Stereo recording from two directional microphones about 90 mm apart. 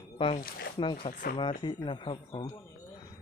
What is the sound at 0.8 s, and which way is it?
Speech, 65° left (ahead or behind).